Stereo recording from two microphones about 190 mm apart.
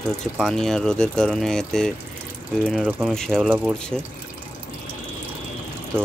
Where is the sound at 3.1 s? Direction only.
5° left (ahead or behind).